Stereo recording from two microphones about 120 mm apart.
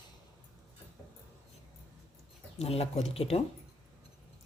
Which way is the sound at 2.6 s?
60° left (ahead or behind).